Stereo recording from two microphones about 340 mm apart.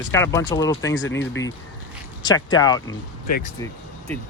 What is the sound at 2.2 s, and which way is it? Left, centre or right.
Speech, centre.